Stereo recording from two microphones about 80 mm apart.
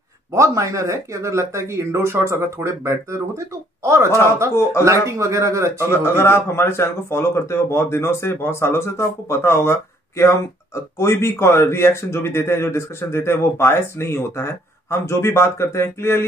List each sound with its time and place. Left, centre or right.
0.3 s speech: right
5.8 s a man's voice: left